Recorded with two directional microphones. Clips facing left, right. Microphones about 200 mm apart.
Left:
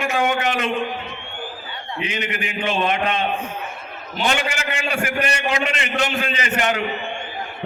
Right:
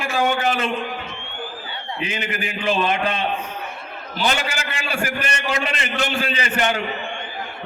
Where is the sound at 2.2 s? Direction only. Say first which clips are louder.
Right 2 dB; 35° right (ahead or behind).